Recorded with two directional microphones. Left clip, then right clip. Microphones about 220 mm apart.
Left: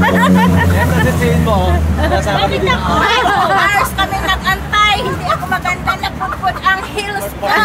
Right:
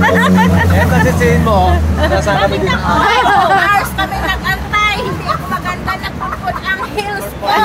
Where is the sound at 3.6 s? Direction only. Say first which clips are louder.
Even; 55° left (ahead or behind).